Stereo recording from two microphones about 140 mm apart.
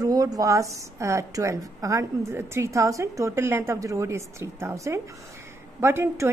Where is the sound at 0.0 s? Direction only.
25° right (ahead or behind).